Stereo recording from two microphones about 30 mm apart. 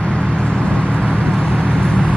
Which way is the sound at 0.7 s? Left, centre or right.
Left.